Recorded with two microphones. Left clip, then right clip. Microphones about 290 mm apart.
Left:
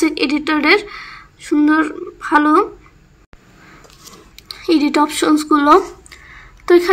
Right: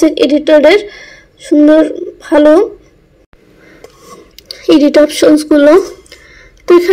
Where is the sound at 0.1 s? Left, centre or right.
Centre.